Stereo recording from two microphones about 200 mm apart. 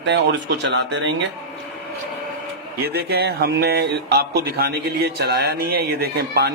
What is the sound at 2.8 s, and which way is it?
Speech, 55° right (ahead or behind).